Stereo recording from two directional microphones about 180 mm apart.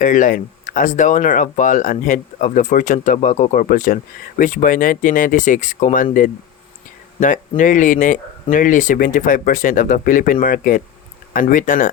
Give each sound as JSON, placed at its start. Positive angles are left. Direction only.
{"t": 0.0, "sound": "speech", "side_deg": 45}
{"t": 7.2, "sound": "speech", "side_deg": 45}